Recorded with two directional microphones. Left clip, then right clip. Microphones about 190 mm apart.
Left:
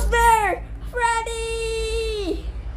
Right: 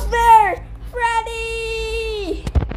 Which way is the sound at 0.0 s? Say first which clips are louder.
Right 5 dB; centre (ahead or behind).